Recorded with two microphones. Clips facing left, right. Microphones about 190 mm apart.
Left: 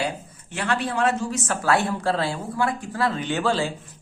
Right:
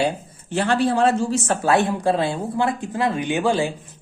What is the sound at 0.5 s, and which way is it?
Speech, 30° right (ahead or behind).